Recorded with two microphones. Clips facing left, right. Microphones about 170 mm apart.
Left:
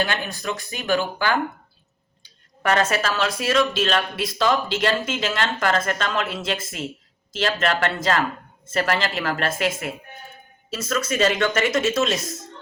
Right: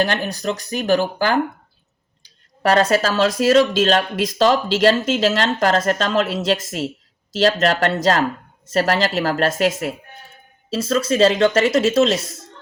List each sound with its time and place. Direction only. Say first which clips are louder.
0.0 s speech: right 5 dB; 40° right (ahead or behind)